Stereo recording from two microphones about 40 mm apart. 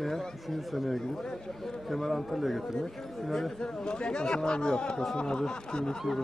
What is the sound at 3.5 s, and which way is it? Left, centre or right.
Speech, centre.